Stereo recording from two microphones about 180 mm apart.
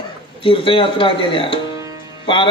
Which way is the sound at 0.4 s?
30° left (ahead or behind).